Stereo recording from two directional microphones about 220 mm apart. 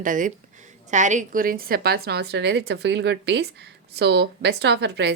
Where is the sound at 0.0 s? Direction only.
35° right (ahead or behind).